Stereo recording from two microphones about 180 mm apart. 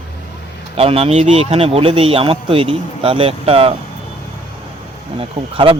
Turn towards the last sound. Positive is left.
turn(degrees=-30)  # may be behind; listen again after turning